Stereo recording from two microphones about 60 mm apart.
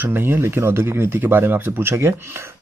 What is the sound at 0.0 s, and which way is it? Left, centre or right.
Speech, right.